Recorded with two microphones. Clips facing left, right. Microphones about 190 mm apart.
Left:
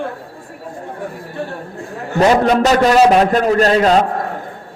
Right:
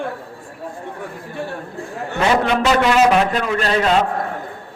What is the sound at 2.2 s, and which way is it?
A man's voice, 40° left (ahead or behind).